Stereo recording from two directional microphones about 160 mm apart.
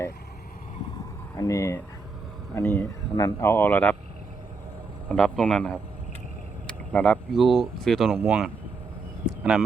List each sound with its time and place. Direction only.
1.4 s speech: 20° left (ahead or behind)
5.0 s speech: 5° left (ahead or behind)